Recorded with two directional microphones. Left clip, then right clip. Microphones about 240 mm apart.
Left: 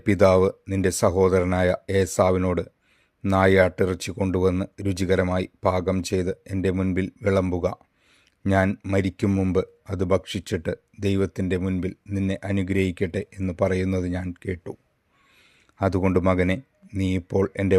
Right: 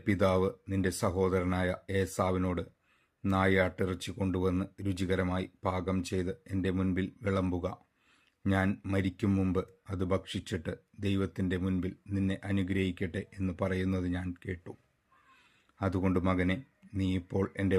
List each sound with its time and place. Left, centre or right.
0.0 s speech: left
15.8 s speech: left